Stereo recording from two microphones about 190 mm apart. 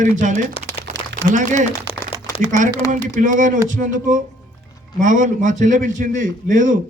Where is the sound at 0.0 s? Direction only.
40° right (ahead or behind).